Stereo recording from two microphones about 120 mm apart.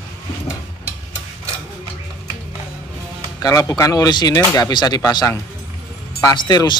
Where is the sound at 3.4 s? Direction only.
30° left (ahead or behind).